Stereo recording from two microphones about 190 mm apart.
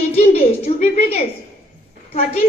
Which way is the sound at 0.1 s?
35° left (ahead or behind).